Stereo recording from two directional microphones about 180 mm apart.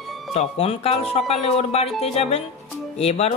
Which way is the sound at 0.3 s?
35° left (ahead or behind).